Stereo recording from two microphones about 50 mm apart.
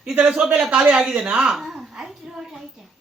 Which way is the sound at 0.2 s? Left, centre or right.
Right.